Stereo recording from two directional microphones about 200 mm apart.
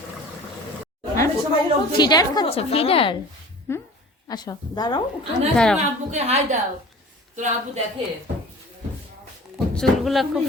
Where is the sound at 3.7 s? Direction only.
15° left (ahead or behind).